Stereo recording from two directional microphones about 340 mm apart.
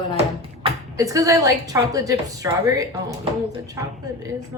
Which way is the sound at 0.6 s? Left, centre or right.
Centre.